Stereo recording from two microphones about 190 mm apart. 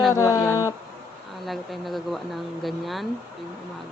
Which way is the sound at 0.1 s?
15° left (ahead or behind).